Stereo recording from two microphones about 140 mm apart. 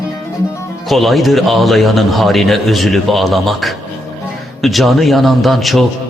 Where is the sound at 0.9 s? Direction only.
Centre (ahead or behind).